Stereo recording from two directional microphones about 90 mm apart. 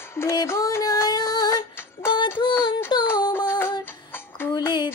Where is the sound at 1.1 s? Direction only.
45° left (ahead or behind).